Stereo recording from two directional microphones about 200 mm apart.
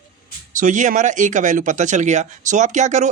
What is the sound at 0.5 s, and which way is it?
Speech, 40° right (ahead or behind).